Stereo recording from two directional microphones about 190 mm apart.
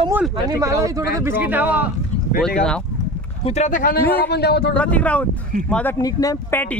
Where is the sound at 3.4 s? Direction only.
35° left (ahead or behind).